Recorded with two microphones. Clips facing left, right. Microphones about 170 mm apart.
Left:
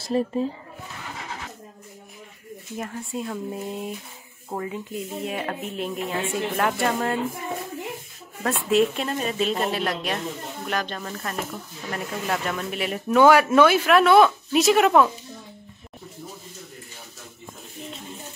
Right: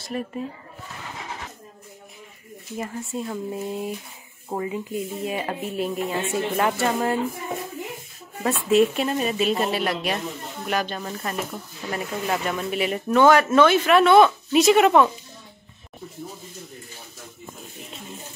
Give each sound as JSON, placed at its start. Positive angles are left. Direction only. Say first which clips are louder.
{"t": 0.1, "sound": "speech", "louder": "left 6 dB", "side_deg": 30}
{"t": 2.8, "sound": "speech", "louder": "right 1 dB", "side_deg": 0}
{"t": 8.5, "sound": "speech", "louder": "right 2 dB", "side_deg": 0}